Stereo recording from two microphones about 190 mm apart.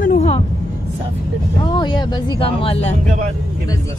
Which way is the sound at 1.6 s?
25° left (ahead or behind).